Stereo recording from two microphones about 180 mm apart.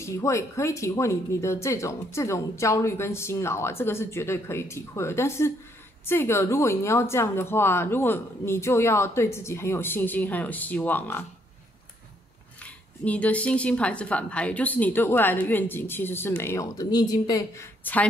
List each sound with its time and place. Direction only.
0.0 s speech: 15° left (ahead or behind)
12.6 s speech: 5° left (ahead or behind)